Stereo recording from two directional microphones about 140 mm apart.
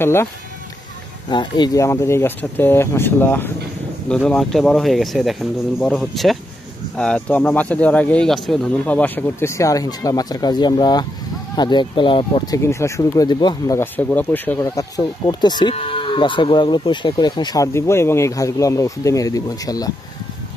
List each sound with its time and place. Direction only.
0.0 s speech: 15° left (ahead or behind)
1.3 s speech: 30° left (ahead or behind)
12.5 s speech: 20° left (ahead or behind)
13.7 s speech: 15° left (ahead or behind)
14.6 s speech: 25° left (ahead or behind)
17.7 s speech: 20° left (ahead or behind)